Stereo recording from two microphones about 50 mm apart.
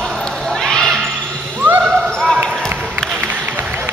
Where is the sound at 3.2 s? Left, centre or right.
Right.